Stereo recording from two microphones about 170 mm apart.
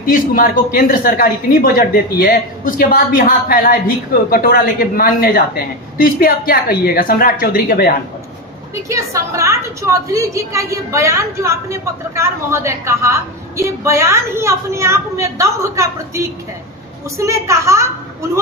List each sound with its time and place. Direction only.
0.0 s speech: 55° left (ahead or behind)
8.9 s a woman's voice: 20° right (ahead or behind)